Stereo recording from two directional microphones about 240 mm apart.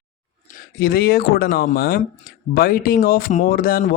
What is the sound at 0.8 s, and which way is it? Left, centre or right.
Speech, left.